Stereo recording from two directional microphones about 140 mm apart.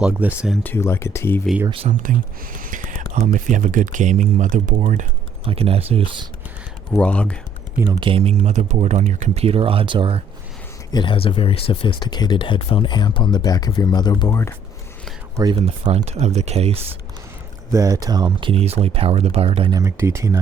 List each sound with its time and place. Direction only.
0.0 s speech: 10° right (ahead or behind)
0.6 s speech: 15° left (ahead or behind)
1.9 s speech: 70° right (ahead or behind)
5.5 s speech: 45° right (ahead or behind)
7.0 s speech: 10° left (ahead or behind)
7.9 s speech: 40° right (ahead or behind)
10.9 s speech: 35° left (ahead or behind)
15.5 s speech: 50° right (ahead or behind)
17.7 s speech: 25° right (ahead or behind); by 19.7 s 45° right (ahead or behind)
19.7 s speech: 20° right (ahead or behind)